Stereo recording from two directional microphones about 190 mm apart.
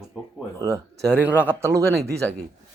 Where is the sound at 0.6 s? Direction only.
15° right (ahead or behind).